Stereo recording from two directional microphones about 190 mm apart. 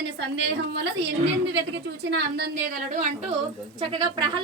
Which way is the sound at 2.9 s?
40° right (ahead or behind).